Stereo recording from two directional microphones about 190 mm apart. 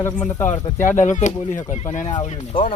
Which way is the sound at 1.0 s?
40° left (ahead or behind).